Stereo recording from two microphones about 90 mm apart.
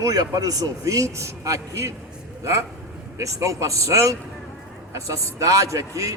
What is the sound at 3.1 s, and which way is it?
A man's voice, 35° right (ahead or behind).